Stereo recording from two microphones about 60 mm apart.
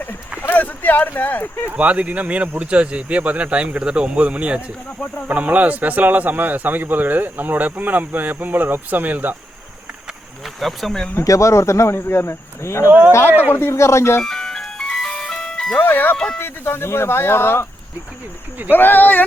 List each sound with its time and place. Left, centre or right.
0.5 s speech: left
1.7 s speech: right
10.6 s speech: centre
11.2 s speech: left
13.2 s speech: right
13.5 s speech: left
13.7 s speech: left
14.3 s ice cream truck: centre
15.8 s speech: left
16.1 s speech: centre
16.4 s speech: left
18.7 s speech: left